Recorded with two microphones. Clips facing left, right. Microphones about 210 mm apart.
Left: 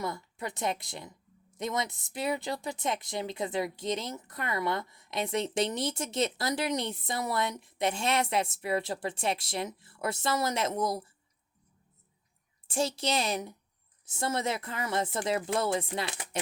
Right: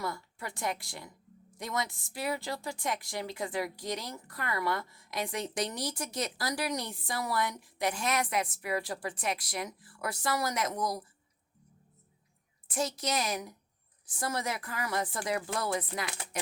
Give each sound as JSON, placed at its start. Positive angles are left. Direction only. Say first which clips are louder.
{"t": 0.0, "sound": "a woman's voice", "louder": "left 2 dB", "side_deg": 20}
{"t": 12.6, "sound": "a woman's voice", "louder": "left 3 dB", "side_deg": 30}